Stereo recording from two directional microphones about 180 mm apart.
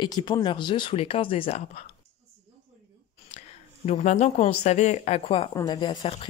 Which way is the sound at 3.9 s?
40° left (ahead or behind).